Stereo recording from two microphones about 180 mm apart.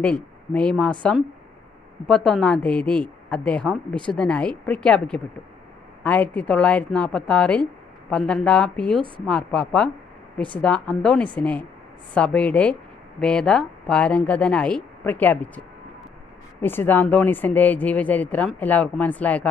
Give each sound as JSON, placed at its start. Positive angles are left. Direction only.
{"t": 0.0, "sound": "speech", "side_deg": 5}
{"t": 2.0, "sound": "speech", "side_deg": 5}
{"t": 16.6, "sound": "speech", "side_deg": 10}